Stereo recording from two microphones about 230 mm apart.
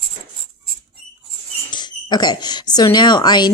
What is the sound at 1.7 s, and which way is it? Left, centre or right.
Speech, centre.